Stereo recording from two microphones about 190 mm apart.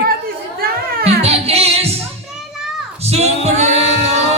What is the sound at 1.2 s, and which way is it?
Music, 30° right (ahead or behind).